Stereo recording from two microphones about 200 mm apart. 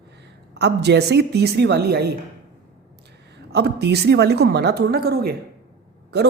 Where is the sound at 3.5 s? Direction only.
55° right (ahead or behind).